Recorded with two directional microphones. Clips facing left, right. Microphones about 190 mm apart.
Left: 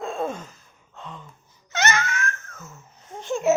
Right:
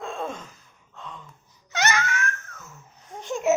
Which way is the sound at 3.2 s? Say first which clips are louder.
Left 3 dB; 25° left (ahead or behind).